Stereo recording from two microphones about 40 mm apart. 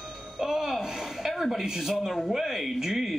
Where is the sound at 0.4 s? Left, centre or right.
Centre.